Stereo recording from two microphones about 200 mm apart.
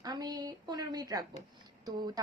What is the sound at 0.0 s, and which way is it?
A woman's voice, 20° right (ahead or behind).